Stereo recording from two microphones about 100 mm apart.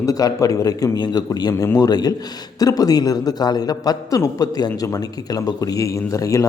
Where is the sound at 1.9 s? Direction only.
40° left (ahead or behind).